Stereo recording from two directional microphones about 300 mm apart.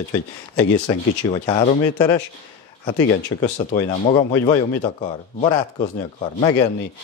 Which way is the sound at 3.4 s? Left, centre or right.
Left.